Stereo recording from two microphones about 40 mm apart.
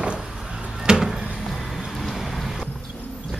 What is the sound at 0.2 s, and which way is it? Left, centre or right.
Music, centre.